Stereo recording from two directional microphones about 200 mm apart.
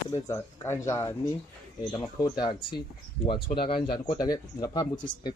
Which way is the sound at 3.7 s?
20° left (ahead or behind).